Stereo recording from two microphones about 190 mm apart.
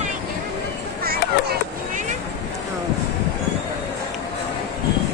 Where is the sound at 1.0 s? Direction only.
55° right (ahead or behind).